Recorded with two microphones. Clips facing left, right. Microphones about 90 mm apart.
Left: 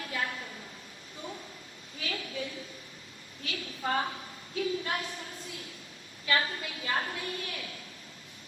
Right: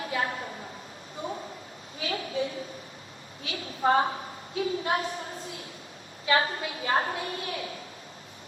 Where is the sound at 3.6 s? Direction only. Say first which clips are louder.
Right 8 dB; 35° right (ahead or behind).